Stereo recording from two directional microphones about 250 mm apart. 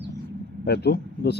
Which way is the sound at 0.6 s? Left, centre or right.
Left.